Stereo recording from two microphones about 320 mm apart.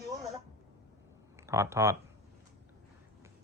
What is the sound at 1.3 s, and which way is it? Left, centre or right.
Speech, centre.